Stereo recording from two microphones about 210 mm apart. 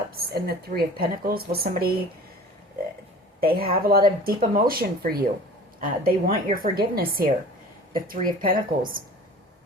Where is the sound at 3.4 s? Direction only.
45° right (ahead or behind).